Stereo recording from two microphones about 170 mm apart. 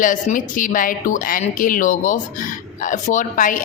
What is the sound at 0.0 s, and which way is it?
Speech, 50° left (ahead or behind).